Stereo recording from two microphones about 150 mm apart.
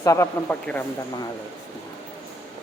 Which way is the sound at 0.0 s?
20° left (ahead or behind).